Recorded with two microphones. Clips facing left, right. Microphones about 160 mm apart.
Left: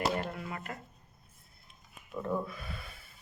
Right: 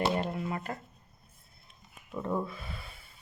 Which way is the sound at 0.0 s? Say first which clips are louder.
Right 3 dB; 25° right (ahead or behind).